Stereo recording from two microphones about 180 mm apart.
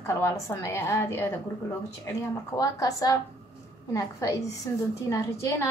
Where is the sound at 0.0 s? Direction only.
15° left (ahead or behind).